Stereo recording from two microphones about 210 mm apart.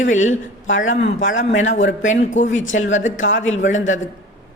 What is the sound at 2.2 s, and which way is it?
Speech, 35° left (ahead or behind).